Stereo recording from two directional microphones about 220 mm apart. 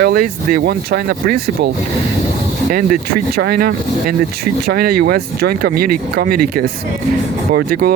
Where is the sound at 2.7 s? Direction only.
40° right (ahead or behind).